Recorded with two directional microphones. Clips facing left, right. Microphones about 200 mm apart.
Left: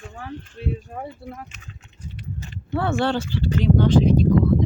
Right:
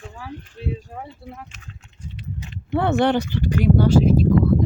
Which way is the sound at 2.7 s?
20° right (ahead or behind).